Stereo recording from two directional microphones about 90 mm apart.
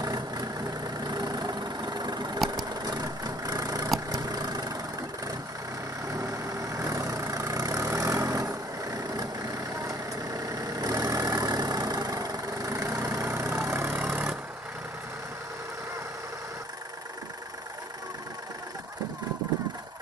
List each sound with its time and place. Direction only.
0.0 s vehicle: 45° right (ahead or behind)
6.0 s vehicle: 40° right (ahead or behind); by 14.0 s 25° right (ahead or behind)